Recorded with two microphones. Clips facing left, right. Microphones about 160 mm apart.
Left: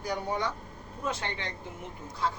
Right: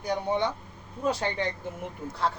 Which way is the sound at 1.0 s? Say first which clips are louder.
Right 7 dB; 35° right (ahead or behind).